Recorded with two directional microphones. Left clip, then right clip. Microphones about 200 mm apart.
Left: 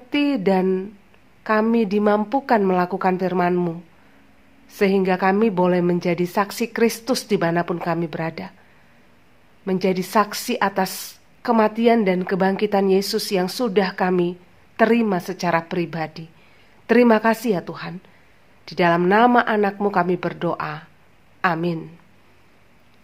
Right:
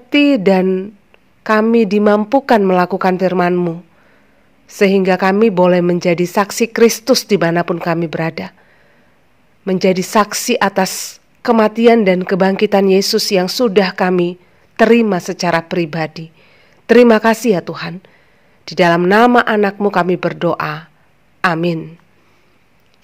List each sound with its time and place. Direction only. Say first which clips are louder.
0.1 s a woman's voice: right 8 dB; 35° right (ahead or behind)
9.7 s a woman's voice: right 7 dB; 35° right (ahead or behind)